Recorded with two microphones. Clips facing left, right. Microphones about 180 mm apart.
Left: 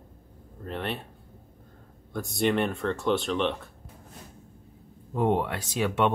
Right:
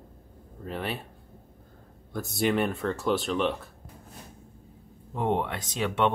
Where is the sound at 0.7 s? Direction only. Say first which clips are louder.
Even; 5° right (ahead or behind).